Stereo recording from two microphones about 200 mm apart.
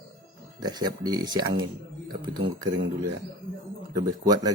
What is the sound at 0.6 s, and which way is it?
Speech, 20° right (ahead or behind).